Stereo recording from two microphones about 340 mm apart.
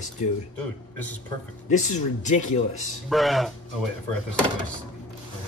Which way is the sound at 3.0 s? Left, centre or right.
Centre.